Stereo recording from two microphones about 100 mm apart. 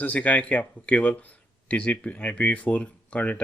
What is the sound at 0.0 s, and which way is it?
Speech, 15° left (ahead or behind).